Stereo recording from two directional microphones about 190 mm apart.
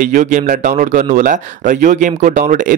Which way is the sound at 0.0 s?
40° right (ahead or behind).